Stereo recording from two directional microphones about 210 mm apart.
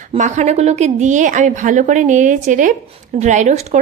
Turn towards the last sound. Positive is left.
turn(degrees=-35)  # may be behind; listen again after turning